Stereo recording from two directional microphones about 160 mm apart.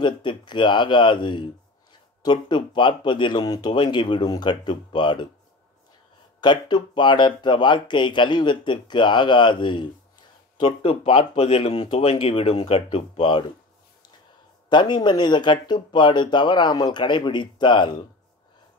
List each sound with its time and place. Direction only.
0.0 s speech: 30° left (ahead or behind)
6.4 s speech: 30° left (ahead or behind)
14.7 s speech: 30° left (ahead or behind)